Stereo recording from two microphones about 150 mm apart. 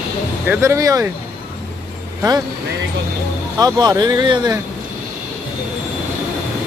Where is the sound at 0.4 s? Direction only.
20° right (ahead or behind).